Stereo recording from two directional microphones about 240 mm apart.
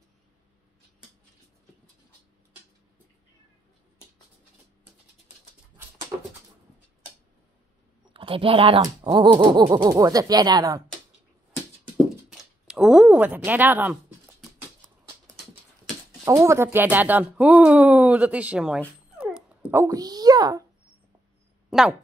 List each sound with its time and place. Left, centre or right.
6.1 s a sound: centre
8.1 s speech: right
12.3 s speech: centre
16.3 s speech: centre
21.6 s speech: centre